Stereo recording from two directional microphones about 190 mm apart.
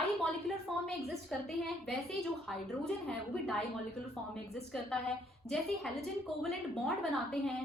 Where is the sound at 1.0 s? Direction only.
Centre (ahead or behind).